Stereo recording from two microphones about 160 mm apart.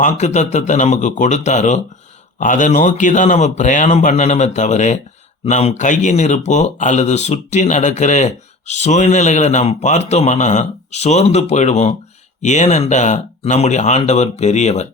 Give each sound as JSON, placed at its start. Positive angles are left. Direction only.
{"t": 0.0, "sound": "speech", "side_deg": 45}